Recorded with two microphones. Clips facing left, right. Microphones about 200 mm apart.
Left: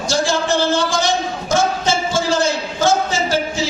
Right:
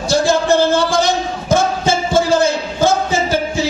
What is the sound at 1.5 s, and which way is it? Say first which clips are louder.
Music: right 3 dB; 55° right (ahead or behind).